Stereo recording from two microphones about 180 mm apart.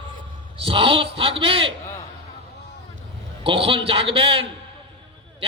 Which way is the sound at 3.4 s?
30° right (ahead or behind).